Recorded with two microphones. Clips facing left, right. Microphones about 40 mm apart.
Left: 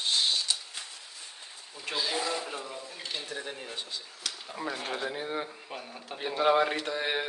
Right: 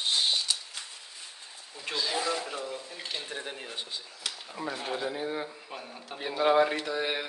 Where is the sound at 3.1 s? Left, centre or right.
Right.